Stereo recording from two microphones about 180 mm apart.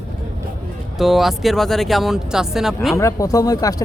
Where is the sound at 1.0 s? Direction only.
Centre (ahead or behind).